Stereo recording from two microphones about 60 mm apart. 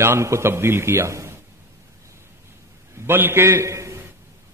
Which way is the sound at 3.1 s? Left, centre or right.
Right.